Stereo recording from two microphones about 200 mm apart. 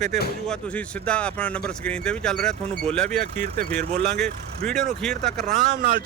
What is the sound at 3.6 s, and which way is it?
Speech, 55° right (ahead or behind).